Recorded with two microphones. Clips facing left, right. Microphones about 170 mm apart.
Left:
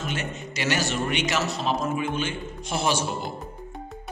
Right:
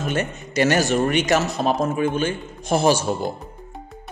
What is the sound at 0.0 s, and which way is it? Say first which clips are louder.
Speech: right 6 dB; 50° right (ahead or behind).